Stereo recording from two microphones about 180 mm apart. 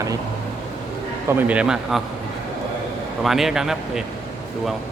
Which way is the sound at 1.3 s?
10° right (ahead or behind).